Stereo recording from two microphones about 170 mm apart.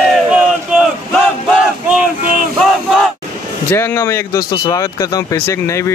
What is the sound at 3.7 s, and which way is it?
Speech, 15° left (ahead or behind).